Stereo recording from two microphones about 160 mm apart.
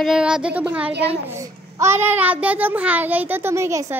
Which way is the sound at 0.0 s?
5° right (ahead or behind).